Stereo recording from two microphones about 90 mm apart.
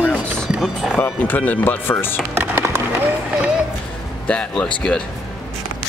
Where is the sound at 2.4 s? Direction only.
25° right (ahead or behind).